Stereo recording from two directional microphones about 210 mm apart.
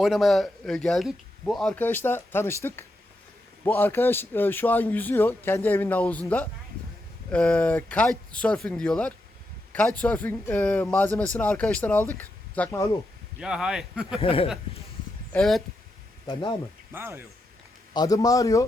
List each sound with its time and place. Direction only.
0.0 s a man's voice: centre (ahead or behind)
13.4 s speech: 5° right (ahead or behind)
14.2 s speech: 25° left (ahead or behind)
15.3 s speech: centre (ahead or behind)
16.2 s speech: 25° left (ahead or behind)
16.9 s speech: 10° right (ahead or behind)
17.9 s a man's voice: 15° left (ahead or behind)